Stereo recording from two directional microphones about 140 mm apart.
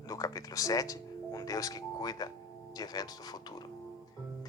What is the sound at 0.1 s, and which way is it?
Music, 25° left (ahead or behind).